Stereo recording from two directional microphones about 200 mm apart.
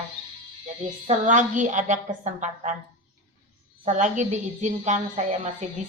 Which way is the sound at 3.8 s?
40° right (ahead or behind).